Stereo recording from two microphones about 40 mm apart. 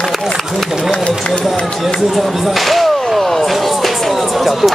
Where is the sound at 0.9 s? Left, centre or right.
Left.